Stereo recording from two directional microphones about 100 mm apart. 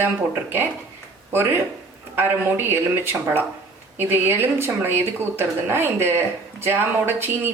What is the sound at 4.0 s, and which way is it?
Speech, 20° right (ahead or behind).